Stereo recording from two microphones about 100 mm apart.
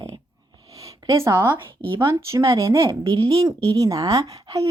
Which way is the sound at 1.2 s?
25° right (ahead or behind).